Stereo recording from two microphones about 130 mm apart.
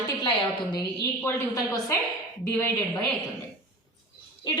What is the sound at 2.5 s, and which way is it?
Speech, 10° left (ahead or behind).